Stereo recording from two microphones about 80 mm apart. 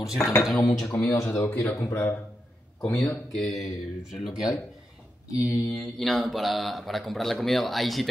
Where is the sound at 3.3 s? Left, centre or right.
Centre.